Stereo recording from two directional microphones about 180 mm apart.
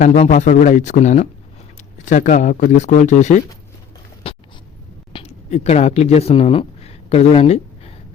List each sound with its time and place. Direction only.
0.0 s speech: 40° left (ahead or behind)
4.2 s a sound: 30° left (ahead or behind)
5.1 s speech: 35° left (ahead or behind)